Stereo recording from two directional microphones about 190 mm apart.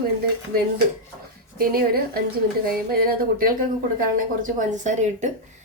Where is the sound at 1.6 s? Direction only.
50° right (ahead or behind).